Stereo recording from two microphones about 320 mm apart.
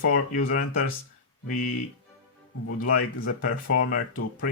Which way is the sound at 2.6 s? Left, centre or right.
Left.